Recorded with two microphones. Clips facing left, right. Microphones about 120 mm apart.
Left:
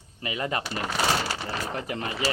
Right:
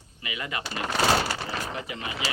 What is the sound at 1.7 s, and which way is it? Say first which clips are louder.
Speech: left 3 dB; 45° left (ahead or behind).